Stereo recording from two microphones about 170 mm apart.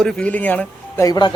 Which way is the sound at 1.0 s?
25° left (ahead or behind).